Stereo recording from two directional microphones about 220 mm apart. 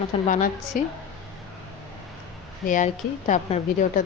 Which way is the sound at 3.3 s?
35° left (ahead or behind).